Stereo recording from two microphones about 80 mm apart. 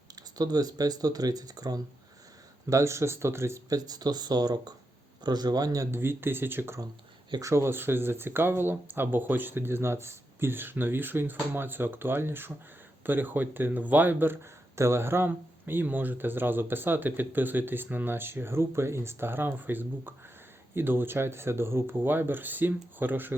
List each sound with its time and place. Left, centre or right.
0.2 s speech: right
2.6 s speech: right
3.7 s speech: right
5.9 s speech: right